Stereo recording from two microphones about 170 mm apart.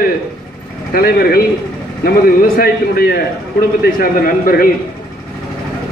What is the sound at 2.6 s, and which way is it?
A man's voice, 65° left (ahead or behind).